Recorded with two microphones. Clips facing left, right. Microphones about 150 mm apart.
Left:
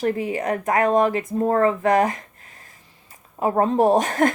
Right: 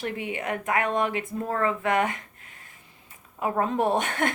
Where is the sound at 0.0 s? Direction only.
40° left (ahead or behind).